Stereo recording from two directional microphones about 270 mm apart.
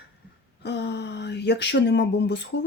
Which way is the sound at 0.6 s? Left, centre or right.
Left.